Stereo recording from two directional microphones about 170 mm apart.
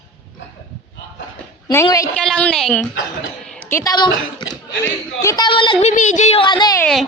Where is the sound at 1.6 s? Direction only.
20° left (ahead or behind).